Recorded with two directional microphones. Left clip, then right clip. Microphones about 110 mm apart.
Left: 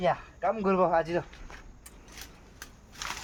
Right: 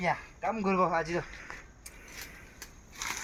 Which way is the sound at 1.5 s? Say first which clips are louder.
Right 3 dB; 10° left (ahead or behind).